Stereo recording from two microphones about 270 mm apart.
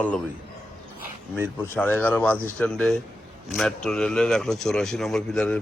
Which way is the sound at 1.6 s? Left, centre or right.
Centre.